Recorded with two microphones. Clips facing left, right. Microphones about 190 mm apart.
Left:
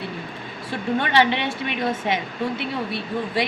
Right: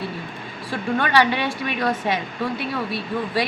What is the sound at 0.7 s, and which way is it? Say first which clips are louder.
A woman's voice: right 1 dB; 25° left (ahead or behind).